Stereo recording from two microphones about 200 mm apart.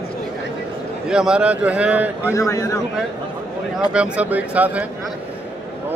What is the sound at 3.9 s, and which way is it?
Speech, 5° right (ahead or behind).